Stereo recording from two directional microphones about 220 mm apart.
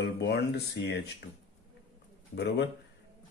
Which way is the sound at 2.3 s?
50° left (ahead or behind).